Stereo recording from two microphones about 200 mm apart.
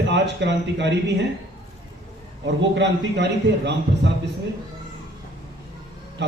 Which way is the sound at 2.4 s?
60° right (ahead or behind).